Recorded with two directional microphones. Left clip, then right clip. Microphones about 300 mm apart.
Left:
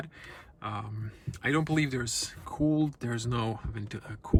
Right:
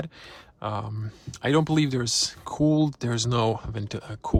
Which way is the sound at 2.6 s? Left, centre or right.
Left.